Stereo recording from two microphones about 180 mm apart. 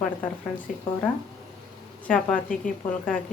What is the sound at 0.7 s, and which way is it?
Speech, 50° left (ahead or behind).